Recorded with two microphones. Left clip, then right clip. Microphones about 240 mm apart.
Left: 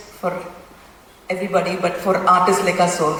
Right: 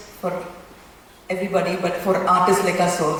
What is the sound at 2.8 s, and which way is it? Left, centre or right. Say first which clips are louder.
Mantra: left 2 dB; centre.